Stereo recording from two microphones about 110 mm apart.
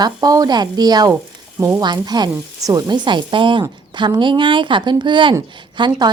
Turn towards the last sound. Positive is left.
turn(degrees=-45)  # may be behind; listen again after turning